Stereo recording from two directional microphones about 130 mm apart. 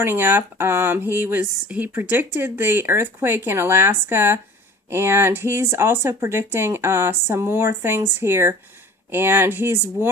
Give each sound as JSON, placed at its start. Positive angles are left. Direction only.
{"t": 0.0, "sound": "speech", "side_deg": -15}